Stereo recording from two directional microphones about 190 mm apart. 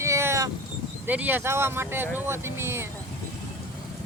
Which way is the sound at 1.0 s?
10° right (ahead or behind).